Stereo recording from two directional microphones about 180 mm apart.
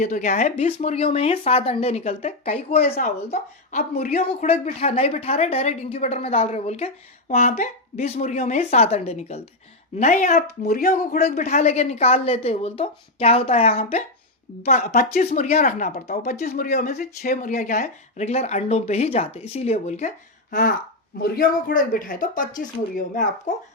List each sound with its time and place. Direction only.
0.0 s a woman's voice: 45° left (ahead or behind)
10.7 s a man's voice: 55° left (ahead or behind)
11.4 s a woman's voice: 40° left (ahead or behind); by 16.3 s 55° left (ahead or behind)
16.3 s a woman's voice: 40° left (ahead or behind)
16.6 s a man's voice: 55° left (ahead or behind)